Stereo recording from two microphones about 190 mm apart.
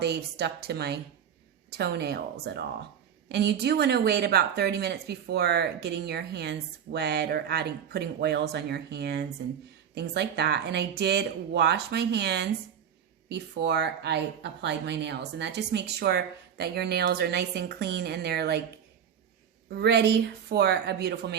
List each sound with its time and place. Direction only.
0.0 s speech: 60° right (ahead or behind)
19.7 s speech: 60° right (ahead or behind)